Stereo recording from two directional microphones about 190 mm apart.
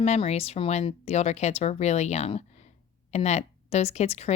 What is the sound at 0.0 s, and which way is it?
Speech, 35° left (ahead or behind).